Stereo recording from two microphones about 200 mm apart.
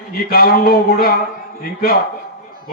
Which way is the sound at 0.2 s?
50° left (ahead or behind).